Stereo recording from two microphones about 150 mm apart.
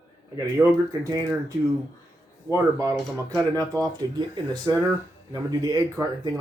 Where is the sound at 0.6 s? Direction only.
20° right (ahead or behind).